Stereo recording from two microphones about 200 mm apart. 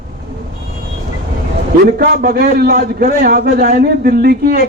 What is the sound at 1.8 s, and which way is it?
A man's voice, 50° right (ahead or behind).